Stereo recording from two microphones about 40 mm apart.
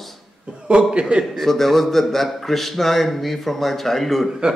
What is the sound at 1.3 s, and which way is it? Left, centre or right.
Speech, centre.